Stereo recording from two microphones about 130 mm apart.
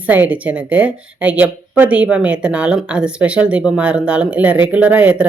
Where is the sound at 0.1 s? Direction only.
10° right (ahead or behind).